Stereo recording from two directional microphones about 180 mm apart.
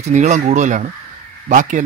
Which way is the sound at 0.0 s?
40° right (ahead or behind).